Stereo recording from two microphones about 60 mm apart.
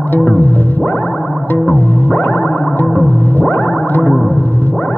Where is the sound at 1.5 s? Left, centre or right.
Left.